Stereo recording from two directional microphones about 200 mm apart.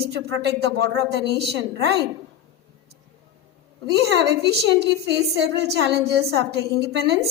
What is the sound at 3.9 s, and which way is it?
A woman's voice, 60° right (ahead or behind).